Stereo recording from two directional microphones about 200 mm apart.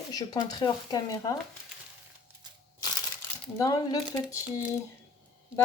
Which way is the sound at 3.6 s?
20° left (ahead or behind).